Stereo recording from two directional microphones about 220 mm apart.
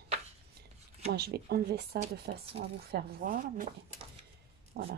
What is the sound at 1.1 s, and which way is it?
Speech, 45° right (ahead or behind).